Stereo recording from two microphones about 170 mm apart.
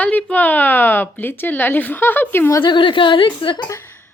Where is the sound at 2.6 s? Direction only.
30° left (ahead or behind).